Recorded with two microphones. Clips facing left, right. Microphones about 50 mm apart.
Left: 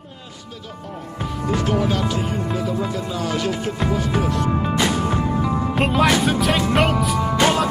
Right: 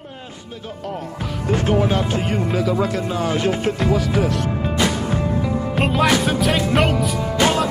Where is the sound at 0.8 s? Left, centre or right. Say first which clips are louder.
Right 6 dB; right.